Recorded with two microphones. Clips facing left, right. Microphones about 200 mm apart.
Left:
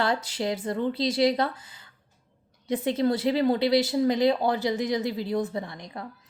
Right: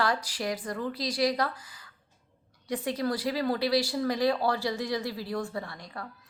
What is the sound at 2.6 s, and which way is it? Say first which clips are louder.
A woman's voice: left 5 dB; 25° left (ahead or behind).